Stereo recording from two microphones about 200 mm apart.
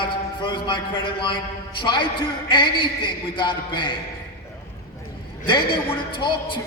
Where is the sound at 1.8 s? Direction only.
25° left (ahead or behind).